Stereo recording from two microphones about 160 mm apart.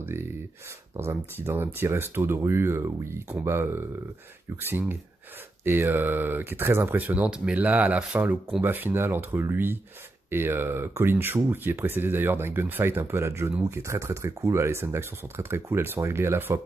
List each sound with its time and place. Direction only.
0.0 s speech: 15° right (ahead or behind)